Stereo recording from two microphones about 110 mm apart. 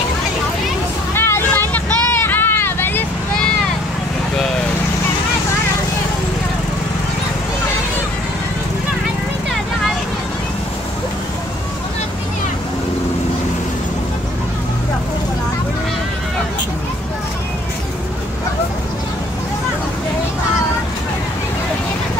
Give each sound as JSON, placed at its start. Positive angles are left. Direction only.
{"t": 1.1, "sound": "vehicle", "side_deg": 20}